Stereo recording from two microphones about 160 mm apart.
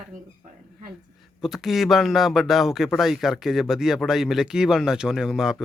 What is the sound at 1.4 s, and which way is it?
Speech, centre (ahead or behind).